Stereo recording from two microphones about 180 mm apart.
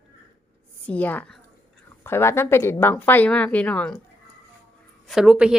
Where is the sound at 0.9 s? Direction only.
10° left (ahead or behind).